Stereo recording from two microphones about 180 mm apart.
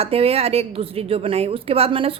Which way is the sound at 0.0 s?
35° right (ahead or behind).